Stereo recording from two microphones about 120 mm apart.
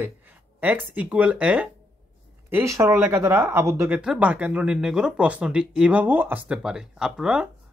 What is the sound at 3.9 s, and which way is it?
Speech, 10° right (ahead or behind).